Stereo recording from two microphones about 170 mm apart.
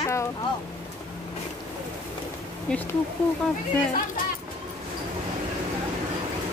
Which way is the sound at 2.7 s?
5° left (ahead or behind).